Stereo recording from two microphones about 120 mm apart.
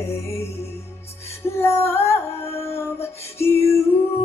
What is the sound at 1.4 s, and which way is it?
Female singing, 20° left (ahead or behind).